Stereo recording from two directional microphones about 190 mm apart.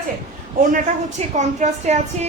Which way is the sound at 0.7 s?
40° right (ahead or behind).